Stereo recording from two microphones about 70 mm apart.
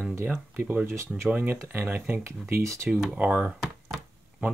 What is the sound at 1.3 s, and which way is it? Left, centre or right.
Speech, right.